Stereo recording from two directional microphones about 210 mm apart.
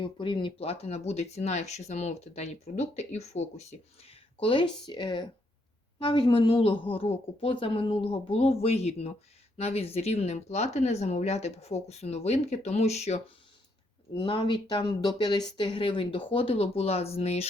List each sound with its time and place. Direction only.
0.0 s a woman's voice: 25° left (ahead or behind)